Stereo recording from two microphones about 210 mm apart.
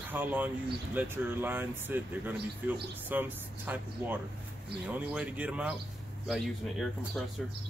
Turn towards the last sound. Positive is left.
turn(degrees=0)  # may be behind; listen again after turning